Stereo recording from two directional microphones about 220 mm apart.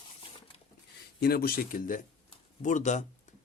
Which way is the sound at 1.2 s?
45° left (ahead or behind).